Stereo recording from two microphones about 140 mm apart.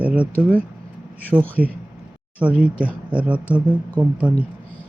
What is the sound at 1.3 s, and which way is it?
Speech, 15° right (ahead or behind).